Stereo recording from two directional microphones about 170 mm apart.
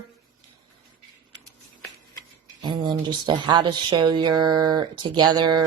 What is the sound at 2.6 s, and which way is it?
Speech, 30° right (ahead or behind).